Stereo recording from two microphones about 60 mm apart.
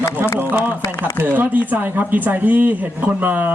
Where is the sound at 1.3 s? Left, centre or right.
Right.